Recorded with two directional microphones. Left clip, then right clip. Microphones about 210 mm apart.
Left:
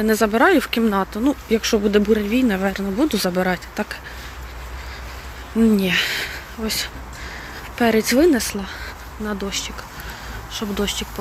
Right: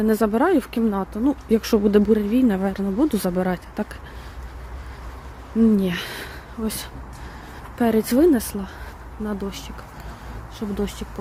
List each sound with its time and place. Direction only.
0.0 s speech: 15° right (ahead or behind)
1.5 s speech: 25° right (ahead or behind)
5.7 s speech: 15° right (ahead or behind)